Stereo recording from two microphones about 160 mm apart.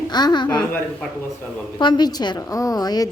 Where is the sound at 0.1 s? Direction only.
25° left (ahead or behind).